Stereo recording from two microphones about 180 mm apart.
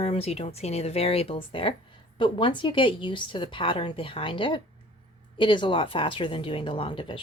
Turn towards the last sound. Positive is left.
turn(degrees=30)  # may be behind; listen again after turning